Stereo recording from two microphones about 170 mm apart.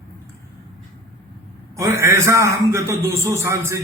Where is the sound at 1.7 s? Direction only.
15° right (ahead or behind).